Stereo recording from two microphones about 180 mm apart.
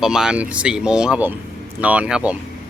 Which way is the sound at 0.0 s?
5° right (ahead or behind).